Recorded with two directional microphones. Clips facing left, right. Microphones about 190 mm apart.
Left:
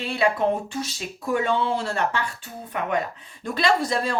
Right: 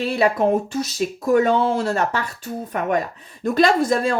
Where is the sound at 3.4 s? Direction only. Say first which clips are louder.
Right 6 dB; 45° right (ahead or behind).